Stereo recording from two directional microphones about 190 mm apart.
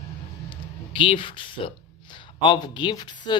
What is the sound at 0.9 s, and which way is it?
Speech, 25° left (ahead or behind).